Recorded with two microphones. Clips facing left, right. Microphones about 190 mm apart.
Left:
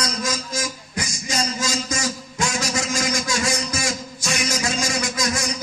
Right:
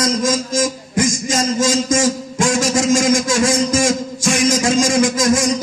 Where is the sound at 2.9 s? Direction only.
90° right.